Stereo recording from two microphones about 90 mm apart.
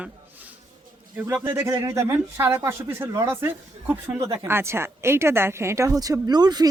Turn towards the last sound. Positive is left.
turn(degrees=-50)  # may be behind; listen again after turning